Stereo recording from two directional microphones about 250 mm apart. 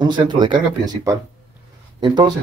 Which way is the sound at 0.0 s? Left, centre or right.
Centre.